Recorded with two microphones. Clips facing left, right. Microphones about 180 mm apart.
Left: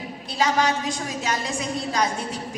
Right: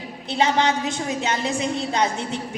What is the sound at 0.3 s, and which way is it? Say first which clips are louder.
A woman's voice: right 2 dB; 25° right (ahead or behind).